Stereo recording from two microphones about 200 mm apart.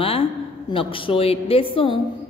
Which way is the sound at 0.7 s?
25° left (ahead or behind).